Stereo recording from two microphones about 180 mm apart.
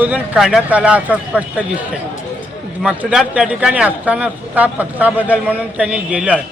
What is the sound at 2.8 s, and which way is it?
A man's voice, 5° right (ahead or behind).